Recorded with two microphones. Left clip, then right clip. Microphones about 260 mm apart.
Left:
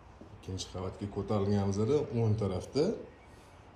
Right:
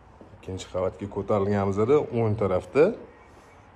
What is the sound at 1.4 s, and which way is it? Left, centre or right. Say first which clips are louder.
Speech: right 8 dB; right.